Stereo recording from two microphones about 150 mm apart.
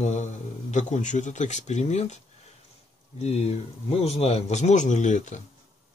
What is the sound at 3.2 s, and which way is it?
Speech, 45° left (ahead or behind).